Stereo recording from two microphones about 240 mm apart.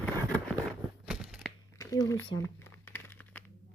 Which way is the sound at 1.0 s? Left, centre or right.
Centre.